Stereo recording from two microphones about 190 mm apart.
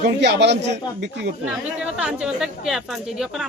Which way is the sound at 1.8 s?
5° right (ahead or behind).